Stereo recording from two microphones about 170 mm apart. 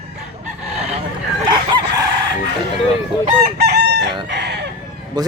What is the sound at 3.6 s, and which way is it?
Chicken, 75° right (ahead or behind).